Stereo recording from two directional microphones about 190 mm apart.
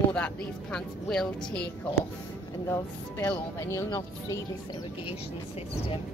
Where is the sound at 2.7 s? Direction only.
15° left (ahead or behind).